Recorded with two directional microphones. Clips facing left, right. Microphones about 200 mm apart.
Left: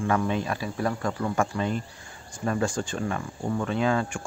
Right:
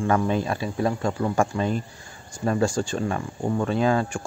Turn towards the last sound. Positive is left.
turn(degrees=-35)  # may be behind; listen again after turning